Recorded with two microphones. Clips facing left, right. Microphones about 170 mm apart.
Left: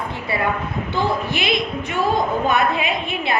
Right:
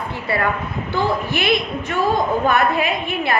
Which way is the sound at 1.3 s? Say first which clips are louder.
Right 2 dB; 55° right (ahead or behind).